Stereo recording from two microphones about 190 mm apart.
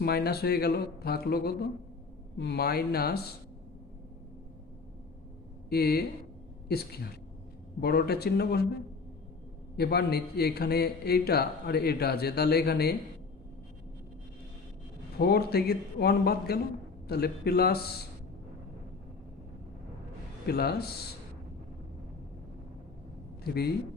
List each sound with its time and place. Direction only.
0.0 s a man's voice: 55° left (ahead or behind)
5.6 s a man's voice: 55° left (ahead or behind)
9.7 s a man's voice: 55° left (ahead or behind)
15.2 s a man's voice: 55° left (ahead or behind)
20.5 s a man's voice: 55° left (ahead or behind)
23.4 s a man's voice: 55° left (ahead or behind)